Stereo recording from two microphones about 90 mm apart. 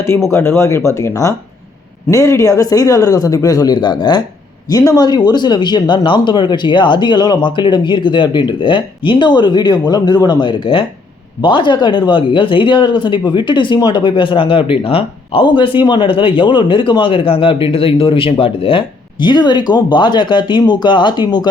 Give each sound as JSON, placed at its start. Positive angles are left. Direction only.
{"t": 0.3, "sound": "speech", "side_deg": 30}
{"t": 4.7, "sound": "speech", "side_deg": 40}